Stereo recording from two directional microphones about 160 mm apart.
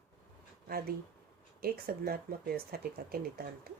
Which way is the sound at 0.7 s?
70° right (ahead or behind).